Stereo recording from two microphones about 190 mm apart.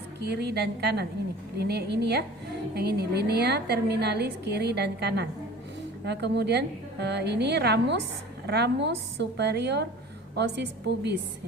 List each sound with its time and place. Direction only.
0.3 s a woman's voice: 60° right (ahead or behind)